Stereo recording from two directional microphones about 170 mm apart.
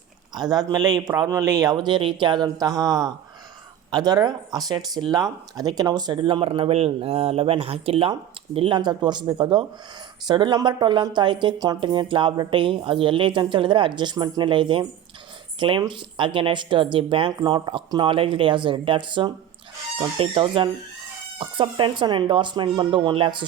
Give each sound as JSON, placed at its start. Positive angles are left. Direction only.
{"t": 0.3, "sound": "speech", "side_deg": -25}